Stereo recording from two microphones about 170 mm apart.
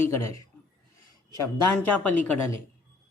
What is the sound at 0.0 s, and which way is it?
Speech, 15° left (ahead or behind).